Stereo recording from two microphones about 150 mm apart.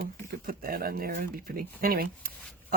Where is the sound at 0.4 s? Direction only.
80° right.